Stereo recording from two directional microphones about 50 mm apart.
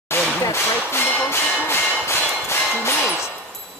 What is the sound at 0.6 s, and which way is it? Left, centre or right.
Speech, left.